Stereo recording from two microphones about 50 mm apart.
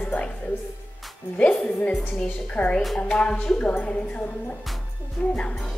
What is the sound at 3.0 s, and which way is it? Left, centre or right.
Speech, centre.